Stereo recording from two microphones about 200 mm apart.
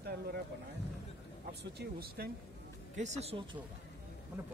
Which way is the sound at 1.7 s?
50° right (ahead or behind).